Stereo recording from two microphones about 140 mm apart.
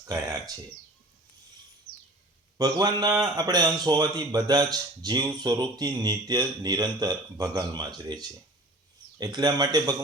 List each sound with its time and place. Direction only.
0.0 s a man's voice: 25° right (ahead or behind)
2.6 s a man's voice: 30° right (ahead or behind)